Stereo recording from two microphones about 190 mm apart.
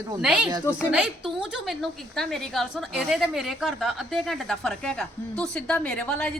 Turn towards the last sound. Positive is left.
turn(degrees=5)  # may be behind; listen again after turning